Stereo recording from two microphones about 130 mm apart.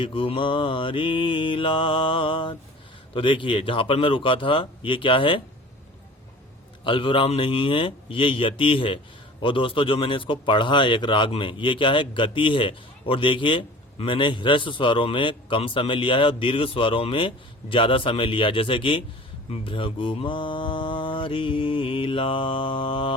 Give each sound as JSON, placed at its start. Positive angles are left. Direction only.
{"t": 0.0, "sound": "a man's voice", "side_deg": 45}
{"t": 6.8, "sound": "a man's voice", "side_deg": 40}
{"t": 19.5, "sound": "mantra", "side_deg": 40}